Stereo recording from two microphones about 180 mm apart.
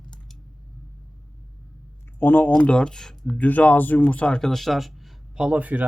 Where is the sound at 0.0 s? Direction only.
5° left (ahead or behind).